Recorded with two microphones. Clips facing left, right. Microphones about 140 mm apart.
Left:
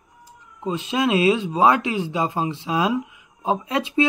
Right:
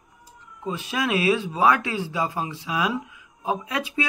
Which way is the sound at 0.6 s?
20° left (ahead or behind).